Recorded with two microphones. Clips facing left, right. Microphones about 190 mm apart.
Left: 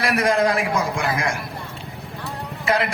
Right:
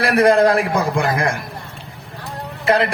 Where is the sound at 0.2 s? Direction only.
35° right (ahead or behind).